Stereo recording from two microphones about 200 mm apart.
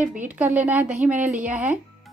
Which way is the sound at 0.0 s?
5° right (ahead or behind).